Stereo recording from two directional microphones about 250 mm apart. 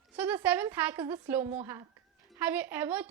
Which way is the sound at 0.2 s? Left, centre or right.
Centre.